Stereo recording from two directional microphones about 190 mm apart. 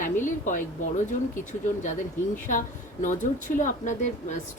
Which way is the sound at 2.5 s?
40° left (ahead or behind).